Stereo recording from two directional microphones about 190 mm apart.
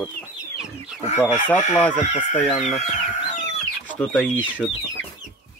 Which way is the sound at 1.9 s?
40° left (ahead or behind).